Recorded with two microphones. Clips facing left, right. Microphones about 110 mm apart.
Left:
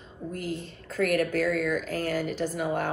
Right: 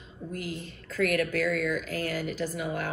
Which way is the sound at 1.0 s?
45° left (ahead or behind).